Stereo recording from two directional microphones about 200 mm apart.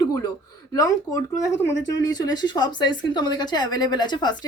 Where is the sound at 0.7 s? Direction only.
15° left (ahead or behind).